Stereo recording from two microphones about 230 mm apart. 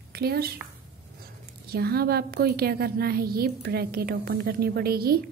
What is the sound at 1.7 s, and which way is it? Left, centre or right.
A woman's voice, right.